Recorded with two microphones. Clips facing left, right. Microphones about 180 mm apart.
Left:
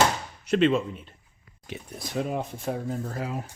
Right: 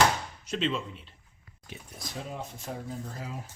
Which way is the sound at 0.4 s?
60° left (ahead or behind).